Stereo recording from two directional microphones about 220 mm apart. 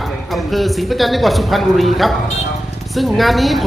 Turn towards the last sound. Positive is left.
turn(degrees=0)  # may be behind; listen again after turning